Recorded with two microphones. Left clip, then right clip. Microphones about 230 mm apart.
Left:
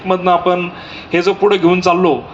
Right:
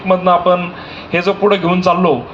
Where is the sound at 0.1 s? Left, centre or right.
Left.